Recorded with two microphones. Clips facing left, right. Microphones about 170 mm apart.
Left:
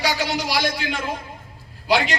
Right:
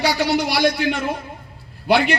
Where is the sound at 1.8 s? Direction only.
60° right (ahead or behind).